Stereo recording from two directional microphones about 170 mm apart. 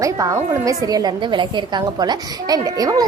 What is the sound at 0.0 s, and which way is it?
A woman's voice, 20° right (ahead or behind).